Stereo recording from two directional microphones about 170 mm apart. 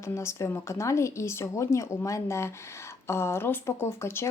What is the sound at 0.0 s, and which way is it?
Speech, 15° left (ahead or behind).